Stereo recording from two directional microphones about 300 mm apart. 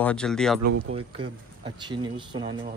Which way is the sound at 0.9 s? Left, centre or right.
Centre.